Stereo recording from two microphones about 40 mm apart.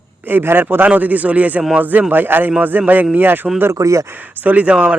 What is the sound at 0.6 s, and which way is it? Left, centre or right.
Speech, right.